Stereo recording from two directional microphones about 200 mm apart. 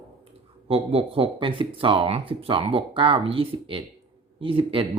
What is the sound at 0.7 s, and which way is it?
Speech, 30° right (ahead or behind).